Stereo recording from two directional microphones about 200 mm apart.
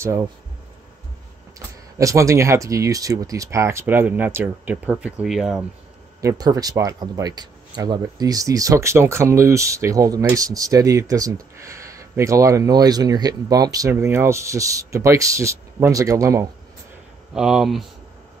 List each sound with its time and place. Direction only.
0.0 s speech: 15° right (ahead or behind)
2.0 s speech: 15° right (ahead or behind)
6.2 s speech: 20° right (ahead or behind)
17.3 s speech: 5° right (ahead or behind)